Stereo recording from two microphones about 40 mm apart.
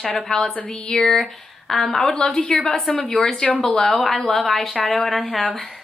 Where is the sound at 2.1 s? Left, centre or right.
Left.